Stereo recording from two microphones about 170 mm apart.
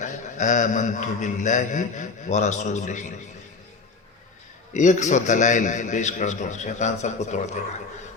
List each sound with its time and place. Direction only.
0.0 s mantra: 45° left (ahead or behind)
4.7 s mantra: 45° left (ahead or behind)